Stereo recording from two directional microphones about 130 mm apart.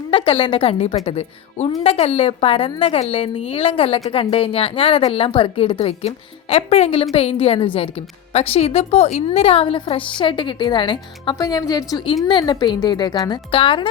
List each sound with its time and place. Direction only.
0.1 s a woman's voice: 45° left (ahead or behind)
13.5 s speech: 40° left (ahead or behind)